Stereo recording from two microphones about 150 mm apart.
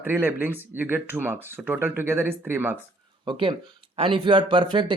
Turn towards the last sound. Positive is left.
turn(degrees=-30)  # may be behind; listen again after turning